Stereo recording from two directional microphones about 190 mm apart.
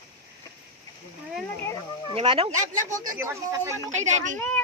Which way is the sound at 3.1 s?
15° right (ahead or behind).